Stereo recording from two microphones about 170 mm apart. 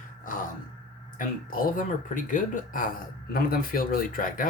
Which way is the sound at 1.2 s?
55° left (ahead or behind).